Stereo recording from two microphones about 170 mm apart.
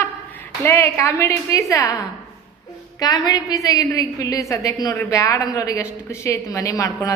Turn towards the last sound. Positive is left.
turn(degrees=20)  # may be behind; listen again after turning